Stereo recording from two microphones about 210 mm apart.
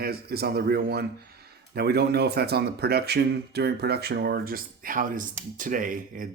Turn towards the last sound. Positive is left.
turn(degrees=-40)  # may be behind; listen again after turning